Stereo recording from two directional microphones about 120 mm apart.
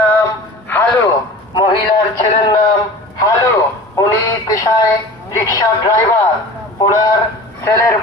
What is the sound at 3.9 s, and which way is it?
A man's voice, 30° left (ahead or behind).